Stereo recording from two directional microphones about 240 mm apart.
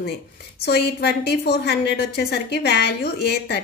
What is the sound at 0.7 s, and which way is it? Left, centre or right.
A woman's voice, left.